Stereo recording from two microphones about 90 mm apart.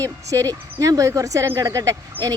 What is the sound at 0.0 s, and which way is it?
Speech, 40° right (ahead or behind).